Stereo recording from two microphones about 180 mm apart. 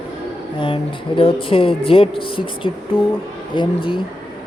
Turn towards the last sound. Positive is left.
turn(degrees=25)  # may be behind; listen again after turning